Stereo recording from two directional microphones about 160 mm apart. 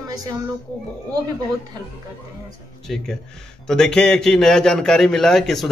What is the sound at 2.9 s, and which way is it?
A man's voice, centre (ahead or behind).